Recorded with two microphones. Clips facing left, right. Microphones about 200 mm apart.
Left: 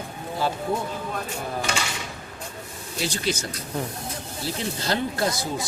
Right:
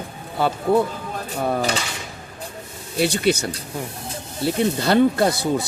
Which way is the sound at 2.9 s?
65° right (ahead or behind).